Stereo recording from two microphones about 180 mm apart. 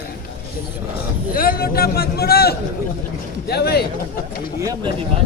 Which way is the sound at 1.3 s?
55° left (ahead or behind).